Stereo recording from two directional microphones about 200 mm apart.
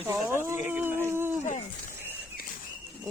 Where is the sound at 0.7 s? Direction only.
10° right (ahead or behind).